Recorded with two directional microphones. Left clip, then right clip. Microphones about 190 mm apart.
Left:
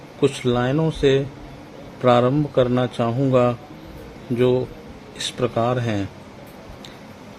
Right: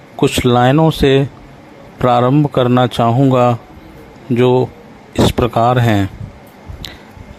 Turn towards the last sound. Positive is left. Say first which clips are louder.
# right 9 dB
turn(degrees=-35)  # may be behind; listen again after turning